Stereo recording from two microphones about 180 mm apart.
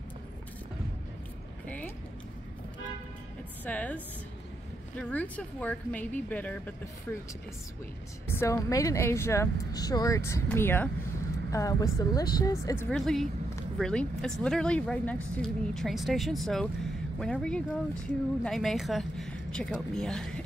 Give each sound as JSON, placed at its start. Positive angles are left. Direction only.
{"t": 3.6, "sound": "speech", "side_deg": 10}
{"t": 8.3, "sound": "a woman's voice", "side_deg": 15}
{"t": 12.9, "sound": "speech", "side_deg": 0}